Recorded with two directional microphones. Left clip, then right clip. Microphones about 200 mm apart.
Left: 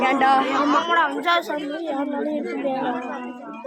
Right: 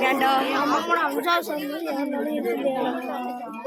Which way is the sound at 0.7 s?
20° left (ahead or behind).